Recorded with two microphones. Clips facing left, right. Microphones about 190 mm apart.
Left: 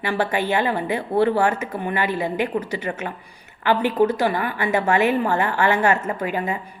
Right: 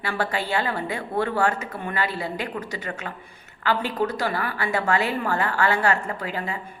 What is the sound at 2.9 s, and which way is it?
A woman's voice, 20° left (ahead or behind).